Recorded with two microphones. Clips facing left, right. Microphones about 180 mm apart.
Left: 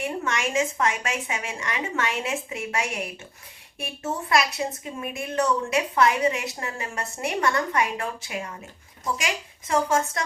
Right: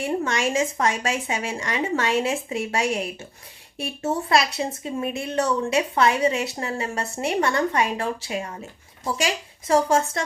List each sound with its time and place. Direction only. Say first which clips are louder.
0.0 s a woman's voice: right 4 dB; 30° right (ahead or behind)